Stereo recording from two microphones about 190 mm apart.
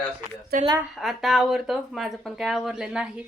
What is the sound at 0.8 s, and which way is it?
Speech, centre (ahead or behind).